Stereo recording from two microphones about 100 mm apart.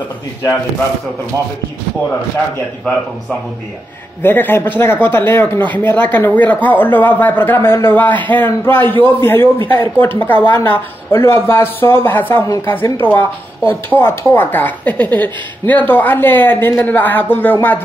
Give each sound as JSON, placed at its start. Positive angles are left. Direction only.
{"t": 4.2, "sound": "speech", "side_deg": 20}